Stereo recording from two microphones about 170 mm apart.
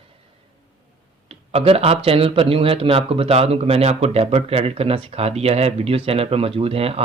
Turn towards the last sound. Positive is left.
turn(degrees=-35)  # may be behind; listen again after turning